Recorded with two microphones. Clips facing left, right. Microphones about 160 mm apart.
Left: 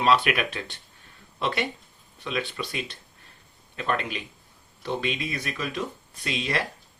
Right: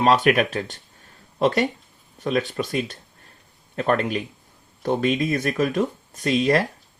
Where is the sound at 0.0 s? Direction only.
45° right (ahead or behind).